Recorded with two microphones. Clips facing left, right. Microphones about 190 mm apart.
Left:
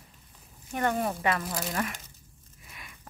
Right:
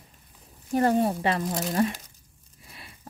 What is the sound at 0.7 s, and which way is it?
Speech, 35° right (ahead or behind).